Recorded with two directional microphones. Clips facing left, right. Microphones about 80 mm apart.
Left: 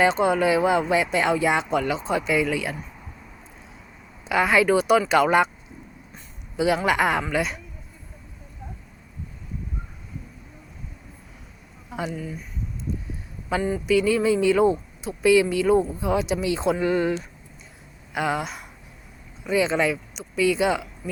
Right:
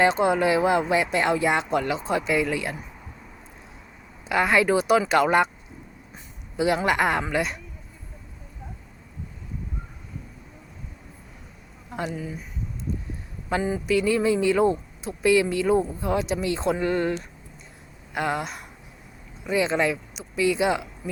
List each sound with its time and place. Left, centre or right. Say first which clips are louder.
0.0 s speech: even; centre
4.3 s speech: left 1 dB; centre
6.6 s speech: left 1 dB; centre
11.9 s a sound: even; centre
12.1 s speech: even; centre
12.9 s a sound: even; centre
13.6 s speech: left 2 dB; centre